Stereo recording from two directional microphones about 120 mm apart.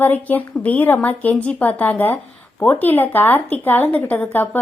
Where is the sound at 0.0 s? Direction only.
15° left (ahead or behind).